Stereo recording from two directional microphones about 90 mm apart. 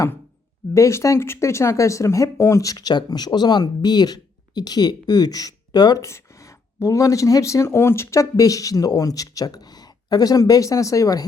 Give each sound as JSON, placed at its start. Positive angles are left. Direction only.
{"t": 0.7, "sound": "speech", "side_deg": 35}
{"t": 6.0, "sound": "speech", "side_deg": 35}